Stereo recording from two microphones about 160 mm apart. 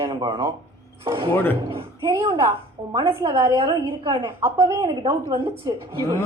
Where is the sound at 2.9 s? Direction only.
25° right (ahead or behind).